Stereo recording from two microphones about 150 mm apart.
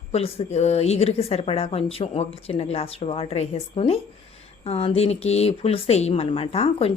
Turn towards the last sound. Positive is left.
turn(degrees=40)  # may be behind; listen again after turning